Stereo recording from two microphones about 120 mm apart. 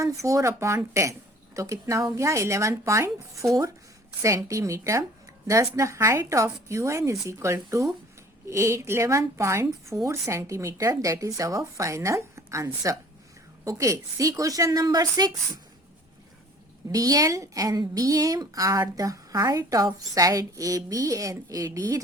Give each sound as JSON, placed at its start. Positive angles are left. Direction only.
{"t": 0.0, "sound": "a woman's voice", "side_deg": -25}
{"t": 16.9, "sound": "a woman's voice", "side_deg": -30}